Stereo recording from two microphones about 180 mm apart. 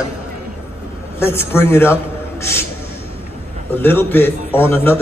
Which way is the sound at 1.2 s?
15° left (ahead or behind).